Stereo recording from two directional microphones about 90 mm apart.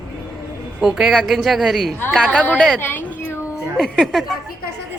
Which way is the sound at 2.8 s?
20° left (ahead or behind).